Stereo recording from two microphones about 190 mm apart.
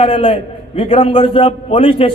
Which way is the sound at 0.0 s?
30° left (ahead or behind).